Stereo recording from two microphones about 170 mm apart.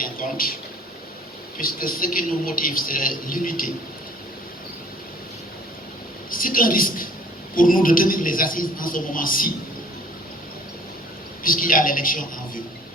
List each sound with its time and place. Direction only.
0.0 s a sound: 55° left (ahead or behind)
1.5 s a man's voice: 55° left (ahead or behind)
6.3 s a man's voice: 55° left (ahead or behind)
11.4 s a man's voice: 55° left (ahead or behind)